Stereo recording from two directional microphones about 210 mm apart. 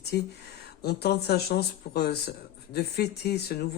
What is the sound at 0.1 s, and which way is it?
Speech, 50° left (ahead or behind).